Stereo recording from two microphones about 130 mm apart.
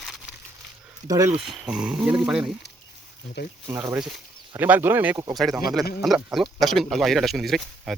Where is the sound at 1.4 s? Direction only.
Centre (ahead or behind).